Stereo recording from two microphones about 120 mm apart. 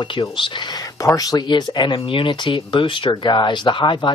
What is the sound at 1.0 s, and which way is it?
Speech, 30° left (ahead or behind).